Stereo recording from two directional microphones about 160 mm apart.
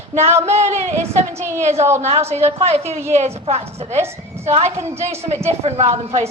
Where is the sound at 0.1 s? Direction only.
40° right (ahead or behind).